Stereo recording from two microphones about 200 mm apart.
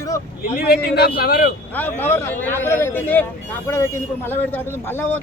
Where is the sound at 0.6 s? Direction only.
50° left (ahead or behind).